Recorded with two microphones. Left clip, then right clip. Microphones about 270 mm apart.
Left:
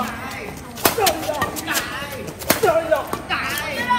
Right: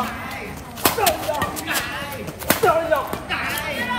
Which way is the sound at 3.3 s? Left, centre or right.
Centre.